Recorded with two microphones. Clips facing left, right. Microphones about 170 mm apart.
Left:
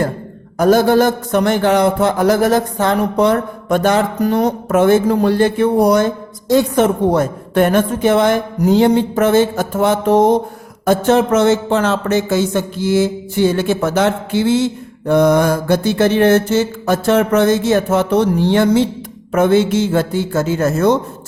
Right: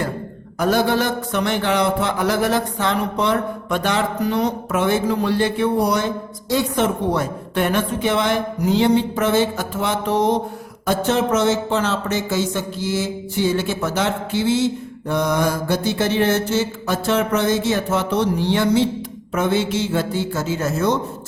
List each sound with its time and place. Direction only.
0.6 s a man's voice: 45° left (ahead or behind)